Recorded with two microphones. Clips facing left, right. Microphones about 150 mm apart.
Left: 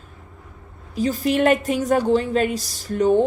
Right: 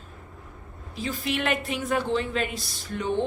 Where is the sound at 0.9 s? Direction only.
40° left (ahead or behind).